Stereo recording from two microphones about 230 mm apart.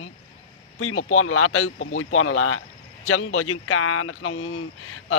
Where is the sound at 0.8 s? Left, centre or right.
Left.